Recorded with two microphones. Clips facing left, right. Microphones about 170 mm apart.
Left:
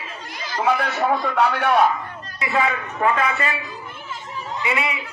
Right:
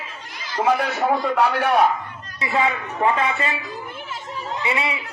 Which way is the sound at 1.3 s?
5° right (ahead or behind).